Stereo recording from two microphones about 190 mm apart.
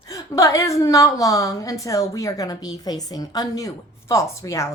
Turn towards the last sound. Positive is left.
turn(degrees=15)  # may be behind; listen again after turning